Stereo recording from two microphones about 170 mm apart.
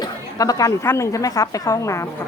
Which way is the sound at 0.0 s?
20° left (ahead or behind).